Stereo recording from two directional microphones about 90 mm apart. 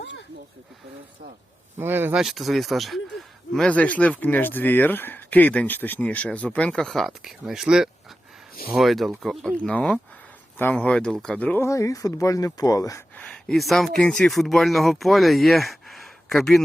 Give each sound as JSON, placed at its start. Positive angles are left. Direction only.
{"t": 1.8, "sound": "speech", "side_deg": -25}
{"t": 2.1, "sound": "speech", "side_deg": 0}
{"t": 3.7, "sound": "speech", "side_deg": 15}
{"t": 9.7, "sound": "speech", "side_deg": 15}
{"t": 11.6, "sound": "speech", "side_deg": 35}
{"t": 13.5, "sound": "speech", "side_deg": 0}